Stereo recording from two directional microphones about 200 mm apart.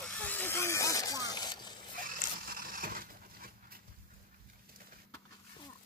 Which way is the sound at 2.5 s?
45° right (ahead or behind).